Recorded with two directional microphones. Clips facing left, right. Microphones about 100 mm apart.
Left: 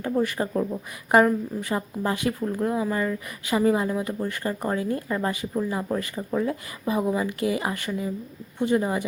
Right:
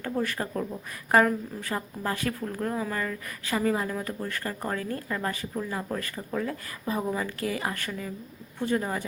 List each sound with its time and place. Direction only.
0.0 s speech: 15° left (ahead or behind)